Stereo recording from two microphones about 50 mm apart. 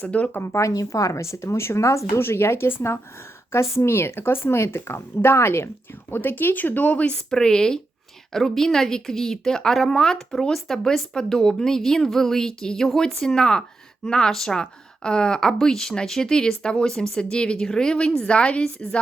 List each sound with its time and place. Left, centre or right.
0.0 s a woman's voice: left
0.3 s a woman's voice: left
2.1 s a woman's voice: left
3.5 s a woman's voice: left
7.3 s a woman's voice: centre
13.2 s a woman's voice: centre